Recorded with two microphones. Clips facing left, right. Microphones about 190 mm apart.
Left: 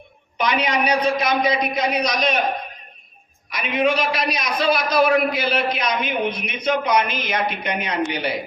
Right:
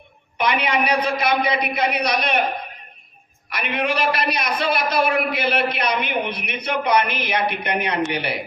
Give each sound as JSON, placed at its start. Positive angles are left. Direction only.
{"t": 0.3, "sound": "a man's voice", "side_deg": -60}
{"t": 3.5, "sound": "a man's voice", "side_deg": -60}